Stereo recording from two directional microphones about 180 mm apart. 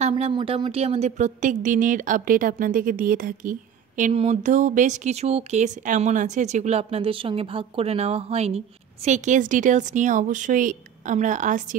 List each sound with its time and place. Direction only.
0.1 s speech: 25° right (ahead or behind); by 11.7 s 45° right (ahead or behind)